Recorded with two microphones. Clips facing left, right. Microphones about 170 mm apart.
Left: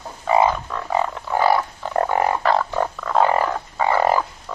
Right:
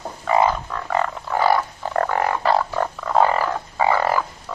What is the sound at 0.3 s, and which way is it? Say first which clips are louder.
Frog: left 1 dB; 15° left (ahead or behind).